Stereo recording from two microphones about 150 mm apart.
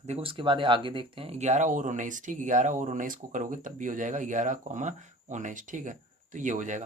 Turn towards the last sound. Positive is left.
turn(degrees=-55)  # may be behind; listen again after turning